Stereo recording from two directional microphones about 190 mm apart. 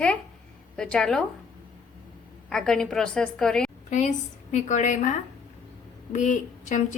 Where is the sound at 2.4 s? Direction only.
5° left (ahead or behind).